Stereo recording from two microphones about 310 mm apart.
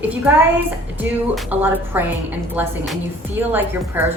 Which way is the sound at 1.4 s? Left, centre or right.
Centre.